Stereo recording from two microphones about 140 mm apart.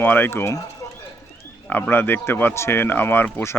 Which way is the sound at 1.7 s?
15° left (ahead or behind).